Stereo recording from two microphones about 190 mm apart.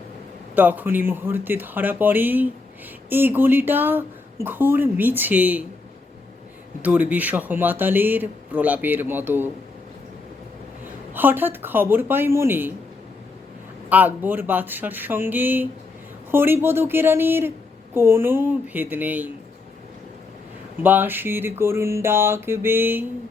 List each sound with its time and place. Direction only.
0.5 s speech: 10° right (ahead or behind)
6.8 s speech: 5° right (ahead or behind)
11.1 s speech: 10° right (ahead or behind)
13.9 s speech: 10° right (ahead or behind)
20.8 s speech: 10° right (ahead or behind)